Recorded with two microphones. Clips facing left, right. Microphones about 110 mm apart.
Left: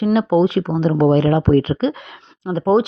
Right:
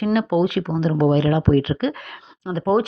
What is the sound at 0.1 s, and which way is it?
Speech, 30° left (ahead or behind).